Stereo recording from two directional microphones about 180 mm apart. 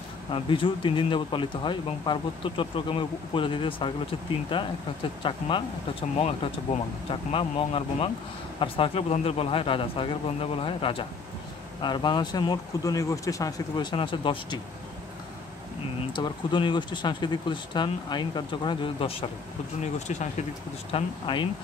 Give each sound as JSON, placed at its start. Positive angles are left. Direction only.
{"t": 0.3, "sound": "speech", "side_deg": 30}
{"t": 16.1, "sound": "speech", "side_deg": 25}
{"t": 20.9, "sound": "speech", "side_deg": 25}